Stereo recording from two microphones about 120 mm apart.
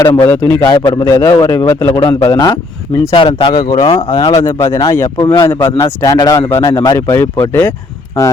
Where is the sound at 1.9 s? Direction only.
55° left (ahead or behind).